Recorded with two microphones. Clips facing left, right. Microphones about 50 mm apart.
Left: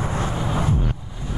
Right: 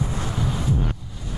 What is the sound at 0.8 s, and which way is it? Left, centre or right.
Music, centre.